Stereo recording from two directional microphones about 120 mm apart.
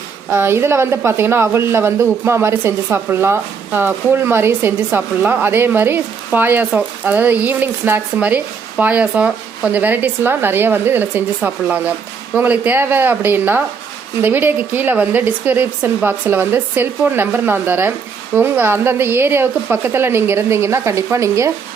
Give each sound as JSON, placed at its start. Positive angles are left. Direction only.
{"t": 0.3, "sound": "speech", "side_deg": -20}